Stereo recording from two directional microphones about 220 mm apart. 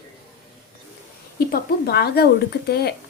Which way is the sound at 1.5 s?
45° left (ahead or behind).